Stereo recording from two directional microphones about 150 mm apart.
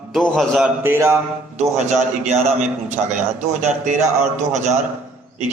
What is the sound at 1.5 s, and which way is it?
A man's voice, 50° right (ahead or behind).